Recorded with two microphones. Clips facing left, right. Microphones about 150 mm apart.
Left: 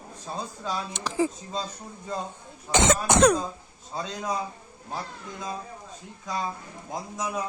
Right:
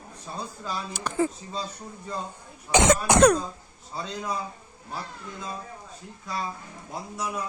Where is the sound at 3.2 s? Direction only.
5° left (ahead or behind).